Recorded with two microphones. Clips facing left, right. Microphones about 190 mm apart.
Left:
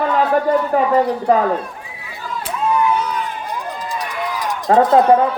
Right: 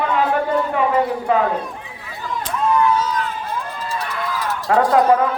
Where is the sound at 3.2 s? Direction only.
15° left (ahead or behind).